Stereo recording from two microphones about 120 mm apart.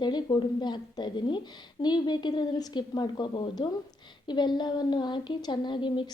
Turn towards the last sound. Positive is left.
turn(degrees=40)  # may be behind; listen again after turning